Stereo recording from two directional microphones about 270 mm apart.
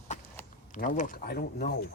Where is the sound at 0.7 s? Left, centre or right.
Left.